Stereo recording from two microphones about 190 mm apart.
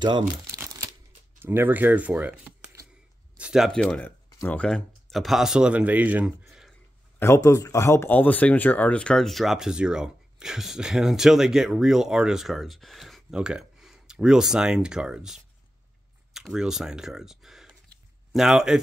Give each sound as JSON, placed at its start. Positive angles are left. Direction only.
{"t": 0.5, "sound": "a sound", "side_deg": -15}
{"t": 1.4, "sound": "speech", "side_deg": -10}
{"t": 7.2, "sound": "speech", "side_deg": 15}